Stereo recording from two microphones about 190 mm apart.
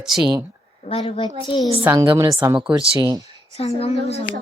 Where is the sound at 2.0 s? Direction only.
20° right (ahead or behind).